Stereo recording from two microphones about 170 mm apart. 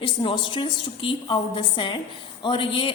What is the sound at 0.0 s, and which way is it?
A woman's voice, 30° left (ahead or behind).